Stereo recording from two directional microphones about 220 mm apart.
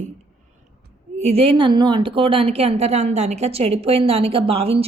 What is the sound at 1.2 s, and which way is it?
A woman's voice, 25° right (ahead or behind).